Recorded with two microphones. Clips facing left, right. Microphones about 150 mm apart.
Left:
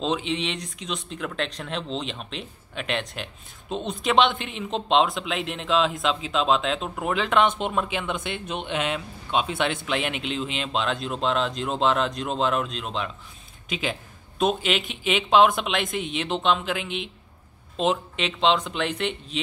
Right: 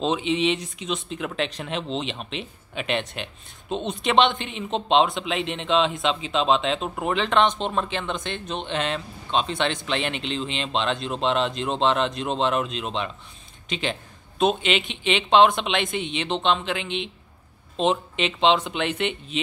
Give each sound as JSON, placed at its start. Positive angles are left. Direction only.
{"t": 0.0, "sound": "speech", "side_deg": 0}